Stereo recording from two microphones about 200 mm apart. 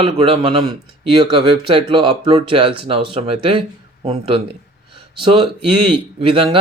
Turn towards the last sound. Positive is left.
turn(degrees=-25)  # may be behind; listen again after turning